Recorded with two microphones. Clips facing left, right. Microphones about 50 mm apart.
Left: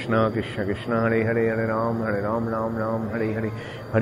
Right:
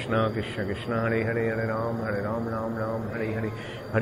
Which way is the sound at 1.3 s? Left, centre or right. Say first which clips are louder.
Left 4 dB; left.